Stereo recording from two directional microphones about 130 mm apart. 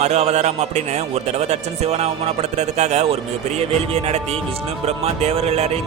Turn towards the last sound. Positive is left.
turn(degrees=-55)  # may be behind; listen again after turning